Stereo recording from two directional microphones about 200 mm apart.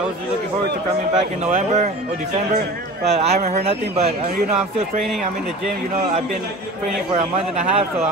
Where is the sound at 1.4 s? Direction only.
35° right (ahead or behind).